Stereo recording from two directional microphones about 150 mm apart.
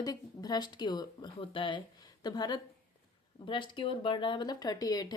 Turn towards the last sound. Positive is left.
turn(degrees=25)  # may be behind; listen again after turning